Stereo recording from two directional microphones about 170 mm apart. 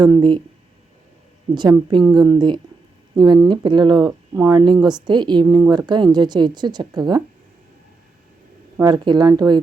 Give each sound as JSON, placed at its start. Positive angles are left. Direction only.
{"t": 0.0, "sound": "speech", "side_deg": -25}
{"t": 1.9, "sound": "speech", "side_deg": -25}
{"t": 8.8, "sound": "speech", "side_deg": -25}